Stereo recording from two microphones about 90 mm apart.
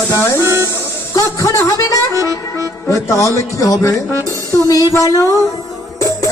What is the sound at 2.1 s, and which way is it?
Vehicle, 40° right (ahead or behind).